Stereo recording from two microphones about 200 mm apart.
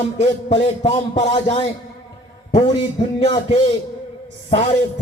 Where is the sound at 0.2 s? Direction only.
30° left (ahead or behind).